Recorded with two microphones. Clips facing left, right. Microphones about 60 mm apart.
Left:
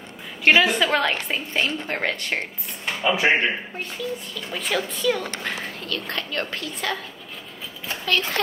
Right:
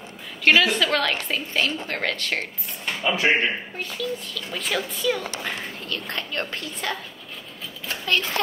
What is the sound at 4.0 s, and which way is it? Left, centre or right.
Speech, left.